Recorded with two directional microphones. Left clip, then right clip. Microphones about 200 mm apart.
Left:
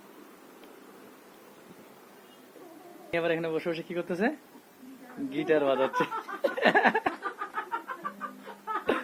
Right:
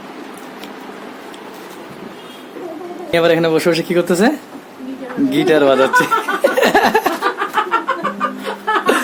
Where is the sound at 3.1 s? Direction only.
15° right (ahead or behind).